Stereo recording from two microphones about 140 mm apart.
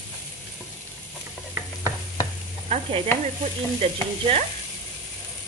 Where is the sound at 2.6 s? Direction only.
50° right (ahead or behind).